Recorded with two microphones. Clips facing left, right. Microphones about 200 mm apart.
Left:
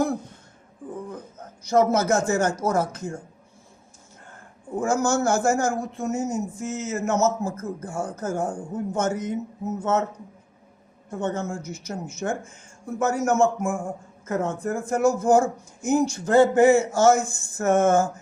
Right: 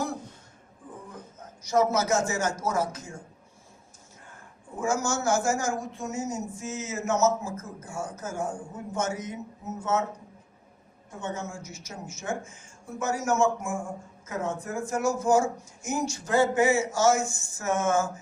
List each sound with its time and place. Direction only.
1.6 s speech: 55° left (ahead or behind)
4.8 s speech: 55° left (ahead or behind)
11.1 s speech: 60° left (ahead or behind)